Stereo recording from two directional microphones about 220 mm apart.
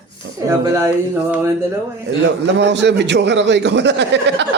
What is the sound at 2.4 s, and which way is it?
A man's voice, 55° right (ahead or behind).